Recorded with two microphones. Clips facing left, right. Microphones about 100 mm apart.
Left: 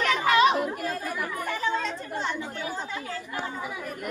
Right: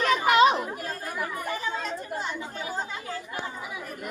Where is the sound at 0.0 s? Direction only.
25° right (ahead or behind).